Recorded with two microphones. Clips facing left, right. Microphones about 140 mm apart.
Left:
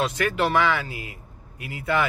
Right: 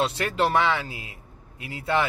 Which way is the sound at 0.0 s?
30° right (ahead or behind).